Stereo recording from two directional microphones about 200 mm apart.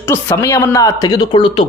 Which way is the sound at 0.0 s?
15° left (ahead or behind).